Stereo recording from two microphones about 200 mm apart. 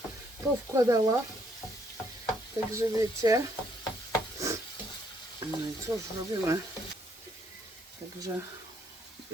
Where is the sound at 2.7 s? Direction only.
15° right (ahead or behind).